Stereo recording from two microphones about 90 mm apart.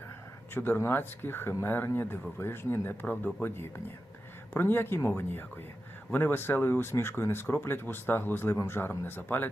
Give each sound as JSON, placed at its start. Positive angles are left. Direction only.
{"t": 0.5, "sound": "speech", "side_deg": 25}